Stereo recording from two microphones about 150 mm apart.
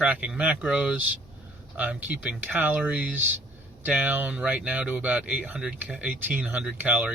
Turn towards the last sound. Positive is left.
turn(degrees=-10)  # may be behind; listen again after turning